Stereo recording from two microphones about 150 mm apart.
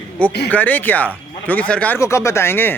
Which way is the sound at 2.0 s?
20° left (ahead or behind).